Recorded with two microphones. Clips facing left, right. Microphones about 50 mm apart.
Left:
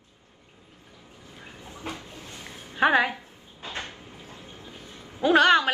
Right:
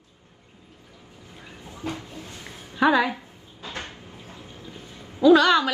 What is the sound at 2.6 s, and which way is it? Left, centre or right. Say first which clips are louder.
Speech: right 1 dB; left.